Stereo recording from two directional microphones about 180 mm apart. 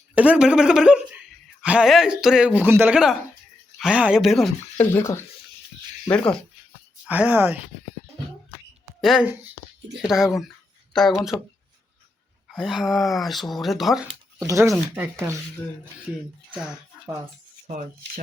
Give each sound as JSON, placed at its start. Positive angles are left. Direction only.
{"t": 0.1, "sound": "speech", "side_deg": -5}
{"t": 4.9, "sound": "speech", "side_deg": 15}
{"t": 7.1, "sound": "speech", "side_deg": -10}
{"t": 9.0, "sound": "speech", "side_deg": 0}
{"t": 12.5, "sound": "speech", "side_deg": 0}
{"t": 14.3, "sound": "speech", "side_deg": -15}
{"t": 17.7, "sound": "speech", "side_deg": -50}